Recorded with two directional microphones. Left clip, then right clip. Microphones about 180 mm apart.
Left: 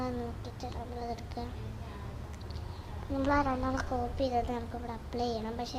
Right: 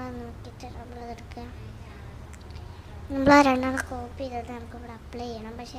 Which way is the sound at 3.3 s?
75° right (ahead or behind).